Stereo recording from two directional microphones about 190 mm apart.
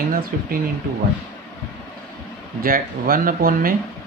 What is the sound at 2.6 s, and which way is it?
Speech, 50° right (ahead or behind).